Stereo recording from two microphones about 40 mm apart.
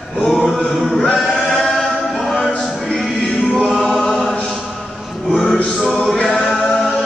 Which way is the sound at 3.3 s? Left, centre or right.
Centre.